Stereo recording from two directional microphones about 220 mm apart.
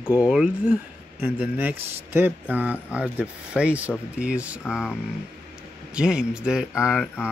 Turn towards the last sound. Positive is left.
turn(degrees=-5)  # may be behind; listen again after turning